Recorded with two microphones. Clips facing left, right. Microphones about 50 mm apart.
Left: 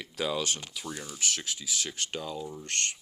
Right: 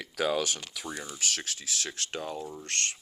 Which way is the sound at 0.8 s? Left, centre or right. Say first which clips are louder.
Right 3 dB; right.